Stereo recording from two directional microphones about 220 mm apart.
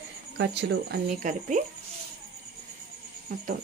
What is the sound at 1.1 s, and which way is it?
Speech, 35° right (ahead or behind).